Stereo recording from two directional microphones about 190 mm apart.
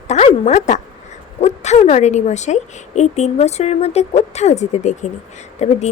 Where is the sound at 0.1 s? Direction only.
35° left (ahead or behind).